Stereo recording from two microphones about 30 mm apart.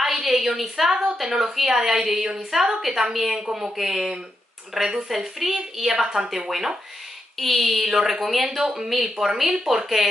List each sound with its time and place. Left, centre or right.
0.0 s a sound: centre
1.1 s a woman's voice: centre
2.8 s a woman's voice: centre
3.4 s speech: right
3.7 s a woman's voice: centre
7.3 s speech: centre
8.5 s a woman's voice: centre